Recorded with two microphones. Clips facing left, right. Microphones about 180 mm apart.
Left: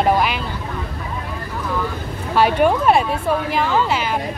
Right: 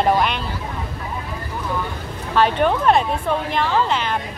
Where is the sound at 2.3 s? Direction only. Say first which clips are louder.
Left 2 dB; 10° left (ahead or behind).